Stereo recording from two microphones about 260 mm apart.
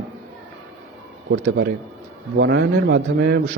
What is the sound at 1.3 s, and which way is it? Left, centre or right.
A man's voice, right.